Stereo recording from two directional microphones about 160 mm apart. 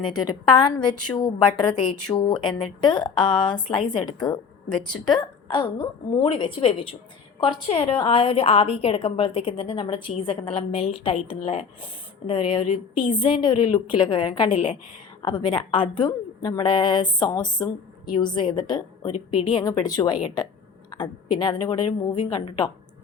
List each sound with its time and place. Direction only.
0.0 s a woman's voice: 25° left (ahead or behind)
4.3 s speech: 5° left (ahead or behind)
5.0 s a woman's voice: 30° left (ahead or behind)
12.6 s speech: 50° left (ahead or behind)
13.2 s a woman's voice: 30° left (ahead or behind)